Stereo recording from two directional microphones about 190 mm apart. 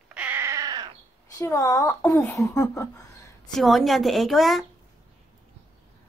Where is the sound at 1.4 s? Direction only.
15° left (ahead or behind).